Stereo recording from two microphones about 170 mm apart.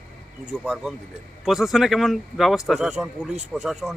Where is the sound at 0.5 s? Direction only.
Centre (ahead or behind).